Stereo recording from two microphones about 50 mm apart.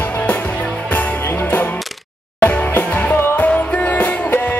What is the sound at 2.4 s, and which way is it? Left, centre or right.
Music, left.